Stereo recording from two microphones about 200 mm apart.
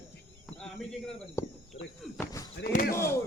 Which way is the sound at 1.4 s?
15° left (ahead or behind).